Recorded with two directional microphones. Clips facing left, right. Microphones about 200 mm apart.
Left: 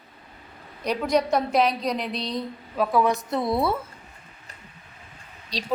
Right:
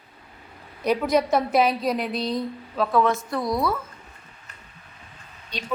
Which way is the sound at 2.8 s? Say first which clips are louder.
Even; 15° left (ahead or behind).